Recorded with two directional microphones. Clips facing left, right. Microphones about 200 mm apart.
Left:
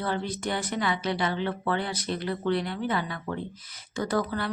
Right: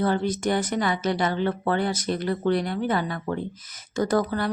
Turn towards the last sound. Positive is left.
turn(degrees=-45)  # may be behind; listen again after turning